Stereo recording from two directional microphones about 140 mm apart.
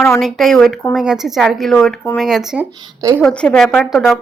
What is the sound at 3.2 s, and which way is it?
Speech, 10° left (ahead or behind).